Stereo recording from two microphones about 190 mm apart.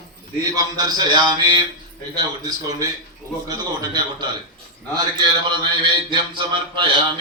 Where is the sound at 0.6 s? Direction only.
20° right (ahead or behind).